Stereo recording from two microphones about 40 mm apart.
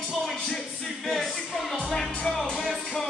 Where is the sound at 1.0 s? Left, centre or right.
Centre.